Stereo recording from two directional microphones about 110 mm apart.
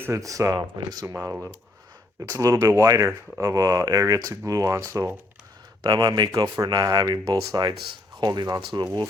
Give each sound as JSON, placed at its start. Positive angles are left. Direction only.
{"t": 0.0, "sound": "speech", "side_deg": -25}